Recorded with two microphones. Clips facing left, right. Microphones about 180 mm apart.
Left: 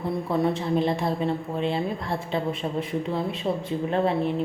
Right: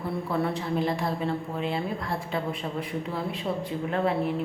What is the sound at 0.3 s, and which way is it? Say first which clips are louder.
A woman's voice: left 4 dB; 20° left (ahead or behind).